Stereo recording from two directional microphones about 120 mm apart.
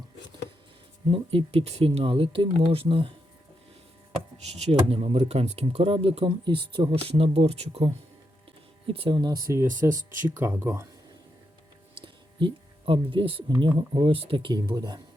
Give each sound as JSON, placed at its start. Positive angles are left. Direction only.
{"t": 1.1, "sound": "speech", "side_deg": -50}
{"t": 4.6, "sound": "speech", "side_deg": -60}
{"t": 8.9, "sound": "speech", "side_deg": -45}
{"t": 12.0, "sound": "a sound", "side_deg": -45}
{"t": 13.5, "sound": "speech", "side_deg": -40}